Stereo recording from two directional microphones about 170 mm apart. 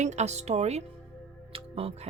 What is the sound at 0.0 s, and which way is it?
Speech, 40° right (ahead or behind).